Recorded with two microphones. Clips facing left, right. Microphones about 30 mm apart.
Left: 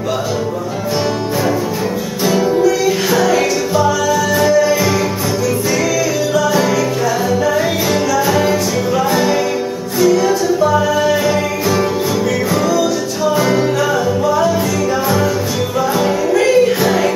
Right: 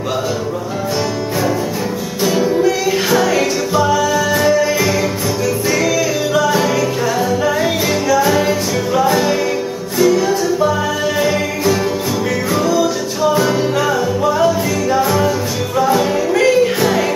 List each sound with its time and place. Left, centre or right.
2.2 s music: centre
6.4 s music: centre
8.1 s music: centre
12.7 s music: centre
13.4 s music: centre